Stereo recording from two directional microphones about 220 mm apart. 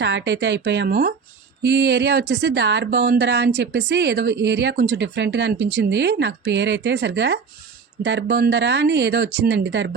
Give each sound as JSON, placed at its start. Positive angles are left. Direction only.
{"t": 0.0, "sound": "speech", "side_deg": -55}